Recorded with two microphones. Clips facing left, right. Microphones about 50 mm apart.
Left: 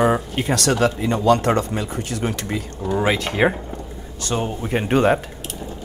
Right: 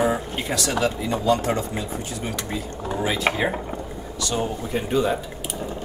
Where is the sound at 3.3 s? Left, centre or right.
Right.